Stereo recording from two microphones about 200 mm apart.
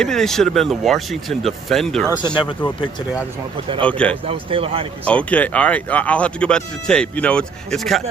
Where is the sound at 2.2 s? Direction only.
25° left (ahead or behind).